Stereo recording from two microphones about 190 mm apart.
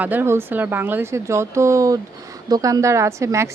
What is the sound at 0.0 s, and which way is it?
A woman's voice, 10° right (ahead or behind).